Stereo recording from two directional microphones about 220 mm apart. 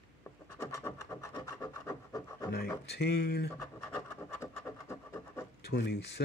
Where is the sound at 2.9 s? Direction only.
50° left (ahead or behind).